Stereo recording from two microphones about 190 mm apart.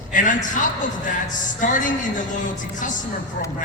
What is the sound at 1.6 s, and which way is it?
Speech, 45° left (ahead or behind).